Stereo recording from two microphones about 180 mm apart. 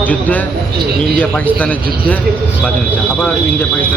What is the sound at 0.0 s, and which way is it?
Speech, 10° left (ahead or behind).